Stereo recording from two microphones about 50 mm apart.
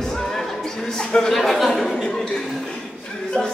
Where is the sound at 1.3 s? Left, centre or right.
Centre.